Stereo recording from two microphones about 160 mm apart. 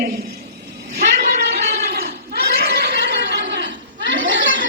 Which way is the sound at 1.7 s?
75° right (ahead or behind).